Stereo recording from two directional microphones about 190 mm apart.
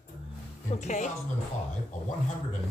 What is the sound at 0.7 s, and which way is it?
Speech, 40° left (ahead or behind).